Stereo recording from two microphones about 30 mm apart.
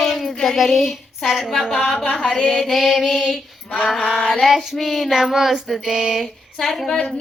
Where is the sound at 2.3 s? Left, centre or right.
Left.